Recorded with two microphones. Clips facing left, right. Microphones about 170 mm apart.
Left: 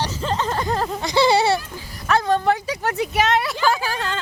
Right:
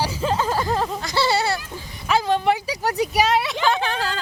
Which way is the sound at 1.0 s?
20° left (ahead or behind).